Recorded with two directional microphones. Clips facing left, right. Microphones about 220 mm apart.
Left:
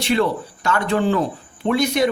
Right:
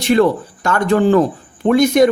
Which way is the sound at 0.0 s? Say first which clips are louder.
Right 6 dB; 45° right (ahead or behind).